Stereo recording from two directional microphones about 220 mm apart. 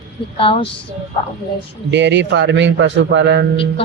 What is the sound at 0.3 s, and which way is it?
Speech, 25° left (ahead or behind).